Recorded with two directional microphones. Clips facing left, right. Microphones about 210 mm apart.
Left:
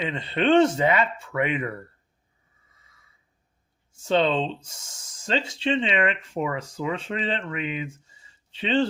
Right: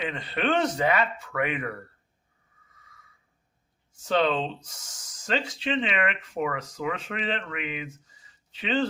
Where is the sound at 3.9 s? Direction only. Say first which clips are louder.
Left 2 dB; 25° left (ahead or behind).